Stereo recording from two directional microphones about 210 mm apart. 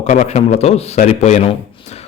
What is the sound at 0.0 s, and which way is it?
Speech, 30° left (ahead or behind).